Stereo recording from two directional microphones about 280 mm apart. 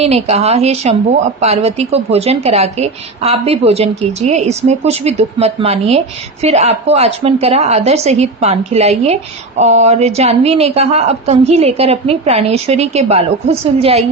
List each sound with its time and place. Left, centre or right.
0.0 s a woman's voice: right